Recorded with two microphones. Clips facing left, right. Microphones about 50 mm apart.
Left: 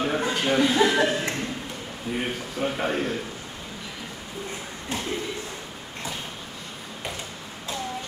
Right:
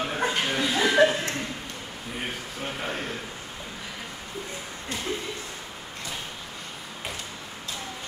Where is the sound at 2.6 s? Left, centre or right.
Centre.